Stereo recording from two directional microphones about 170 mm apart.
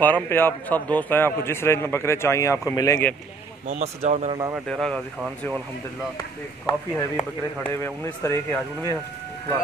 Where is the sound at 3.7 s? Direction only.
40° right (ahead or behind).